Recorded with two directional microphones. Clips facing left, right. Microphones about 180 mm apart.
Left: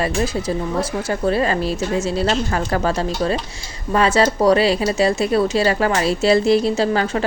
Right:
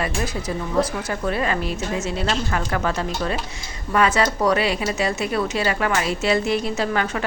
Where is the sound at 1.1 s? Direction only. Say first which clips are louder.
Left 5 dB; 30° left (ahead or behind).